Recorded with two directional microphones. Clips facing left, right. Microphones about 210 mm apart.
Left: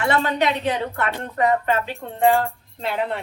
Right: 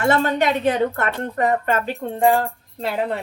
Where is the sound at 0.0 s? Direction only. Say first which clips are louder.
Right 2 dB; 45° right (ahead or behind).